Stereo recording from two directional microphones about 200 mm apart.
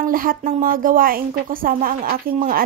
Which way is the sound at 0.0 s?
45° right (ahead or behind).